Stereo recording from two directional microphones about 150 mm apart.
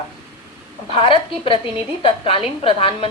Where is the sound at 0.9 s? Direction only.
35° left (ahead or behind).